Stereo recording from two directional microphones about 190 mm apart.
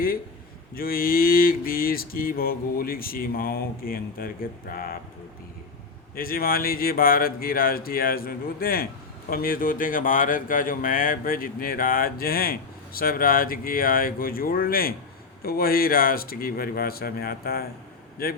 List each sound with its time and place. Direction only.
0.7 s speech: 50° left (ahead or behind)
6.1 s speech: 50° left (ahead or behind)